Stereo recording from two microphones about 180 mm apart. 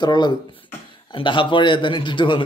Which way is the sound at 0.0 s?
25° left (ahead or behind).